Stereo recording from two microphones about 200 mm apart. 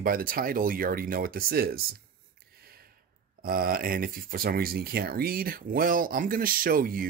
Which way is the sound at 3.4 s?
45° right (ahead or behind).